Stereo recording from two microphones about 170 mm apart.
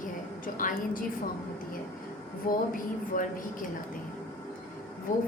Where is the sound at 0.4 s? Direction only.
55° left (ahead or behind).